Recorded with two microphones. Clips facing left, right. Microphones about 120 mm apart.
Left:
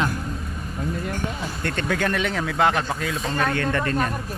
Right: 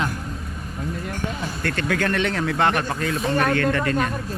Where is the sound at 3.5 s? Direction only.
25° left (ahead or behind).